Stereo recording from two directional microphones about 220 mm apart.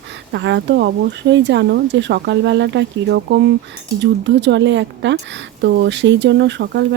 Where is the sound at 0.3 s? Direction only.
50° right (ahead or behind).